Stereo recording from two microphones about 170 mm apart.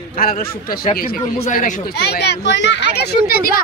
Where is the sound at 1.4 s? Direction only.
45° left (ahead or behind).